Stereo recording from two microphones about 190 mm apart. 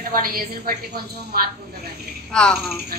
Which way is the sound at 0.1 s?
50° right (ahead or behind).